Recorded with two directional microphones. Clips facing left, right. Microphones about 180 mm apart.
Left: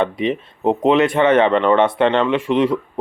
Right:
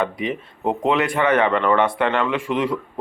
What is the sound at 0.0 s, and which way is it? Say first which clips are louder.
Speech: left 4 dB; 25° left (ahead or behind).